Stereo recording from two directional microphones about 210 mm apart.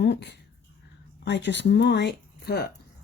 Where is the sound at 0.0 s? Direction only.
55° left (ahead or behind).